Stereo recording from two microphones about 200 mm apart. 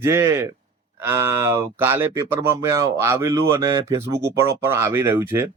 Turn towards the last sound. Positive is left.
turn(degrees=-10)  # may be behind; listen again after turning